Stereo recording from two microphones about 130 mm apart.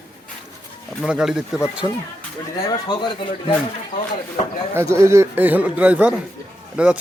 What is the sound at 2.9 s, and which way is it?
Speech, 35° left (ahead or behind).